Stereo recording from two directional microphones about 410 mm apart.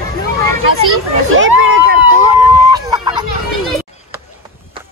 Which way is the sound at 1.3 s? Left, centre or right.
Right.